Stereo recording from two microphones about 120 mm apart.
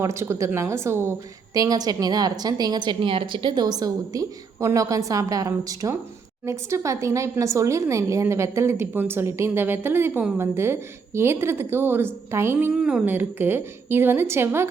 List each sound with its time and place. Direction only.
0.0 s speech: 25° right (ahead or behind)
1.5 s a woman's voice: 30° right (ahead or behind)
12.7 s a woman's voice: 5° right (ahead or behind)